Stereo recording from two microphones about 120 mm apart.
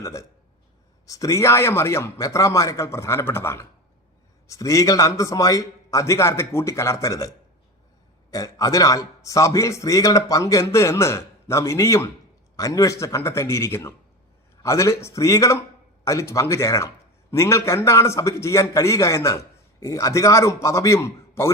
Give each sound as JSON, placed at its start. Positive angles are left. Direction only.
{"t": 0.0, "sound": "a man's voice", "side_deg": 25}
{"t": 8.3, "sound": "a man's voice", "side_deg": 30}